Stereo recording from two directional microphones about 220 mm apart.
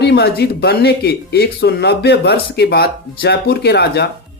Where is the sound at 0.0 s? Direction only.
45° left (ahead or behind).